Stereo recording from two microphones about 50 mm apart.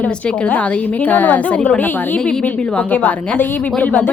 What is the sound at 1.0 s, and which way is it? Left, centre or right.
Speech, left.